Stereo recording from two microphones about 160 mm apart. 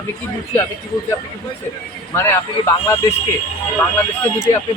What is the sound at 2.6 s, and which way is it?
Speech, 15° left (ahead or behind).